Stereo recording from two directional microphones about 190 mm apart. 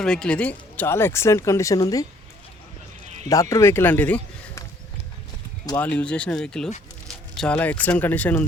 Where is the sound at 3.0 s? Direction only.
35° right (ahead or behind).